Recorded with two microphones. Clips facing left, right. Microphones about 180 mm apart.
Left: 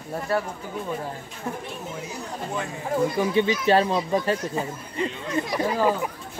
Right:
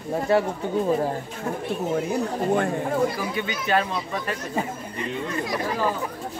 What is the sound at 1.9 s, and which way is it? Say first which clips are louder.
Speech: right 9 dB; 55° right (ahead or behind).